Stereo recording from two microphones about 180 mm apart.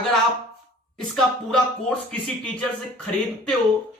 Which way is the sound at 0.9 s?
5° left (ahead or behind).